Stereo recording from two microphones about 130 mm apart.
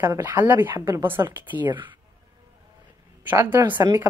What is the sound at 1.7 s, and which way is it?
Speech, 35° right (ahead or behind).